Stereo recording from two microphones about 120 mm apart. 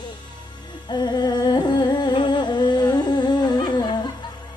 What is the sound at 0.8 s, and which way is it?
Humming, 35° left (ahead or behind).